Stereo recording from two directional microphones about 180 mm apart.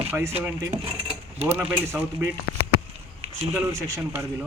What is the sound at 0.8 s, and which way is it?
Keys jangling, 30° right (ahead or behind).